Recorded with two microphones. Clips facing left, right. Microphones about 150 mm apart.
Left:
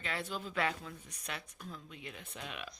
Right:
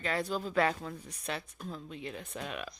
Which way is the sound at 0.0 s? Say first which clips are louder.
Right 7 dB; 40° right (ahead or behind).